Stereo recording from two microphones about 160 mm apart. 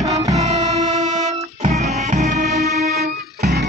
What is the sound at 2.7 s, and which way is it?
Music, 75° right (ahead or behind).